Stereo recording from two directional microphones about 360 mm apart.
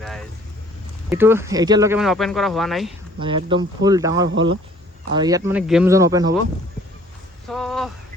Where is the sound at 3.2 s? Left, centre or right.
Centre.